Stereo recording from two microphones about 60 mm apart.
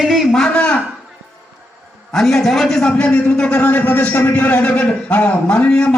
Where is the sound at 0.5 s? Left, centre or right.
Left.